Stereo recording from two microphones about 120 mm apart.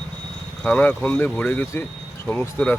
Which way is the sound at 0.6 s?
10° left (ahead or behind).